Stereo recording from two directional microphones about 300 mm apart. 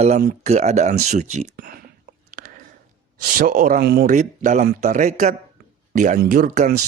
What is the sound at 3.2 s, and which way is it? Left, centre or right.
A man's voice, right.